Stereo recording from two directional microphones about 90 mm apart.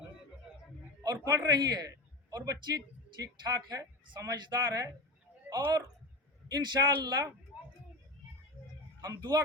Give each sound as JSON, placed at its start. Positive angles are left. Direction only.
{"t": 1.2, "sound": "a man's voice", "side_deg": -35}
{"t": 1.5, "sound": "speech", "side_deg": -50}
{"t": 9.0, "sound": "speech", "side_deg": -45}